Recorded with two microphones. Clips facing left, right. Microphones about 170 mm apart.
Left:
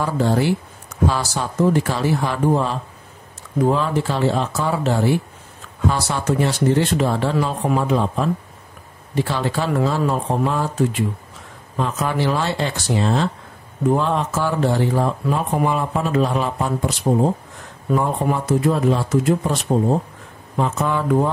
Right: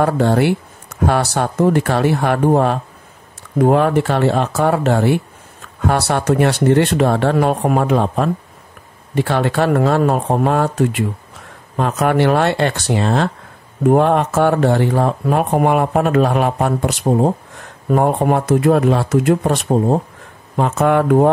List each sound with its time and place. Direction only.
0.0 s speech: 65° right (ahead or behind)
17.9 s speech: 60° right (ahead or behind)